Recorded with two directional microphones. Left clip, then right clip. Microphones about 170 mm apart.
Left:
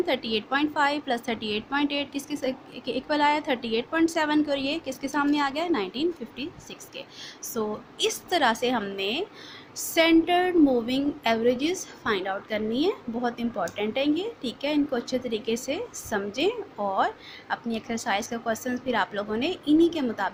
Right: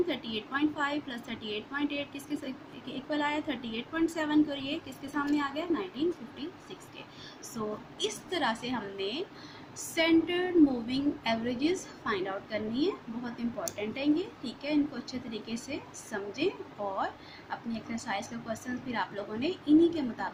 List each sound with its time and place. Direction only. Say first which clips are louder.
0.1 s a woman's voice: left 8 dB; 55° left (ahead or behind)
8.0 s a woman's voice: left 8 dB; 55° left (ahead or behind)